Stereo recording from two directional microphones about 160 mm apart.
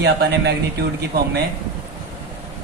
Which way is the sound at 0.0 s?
90° right.